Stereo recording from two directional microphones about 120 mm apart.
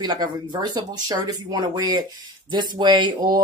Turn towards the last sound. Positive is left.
turn(degrees=-40)  # may be behind; listen again after turning